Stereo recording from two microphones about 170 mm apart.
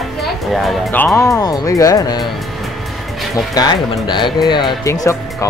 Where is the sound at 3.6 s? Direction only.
20° left (ahead or behind).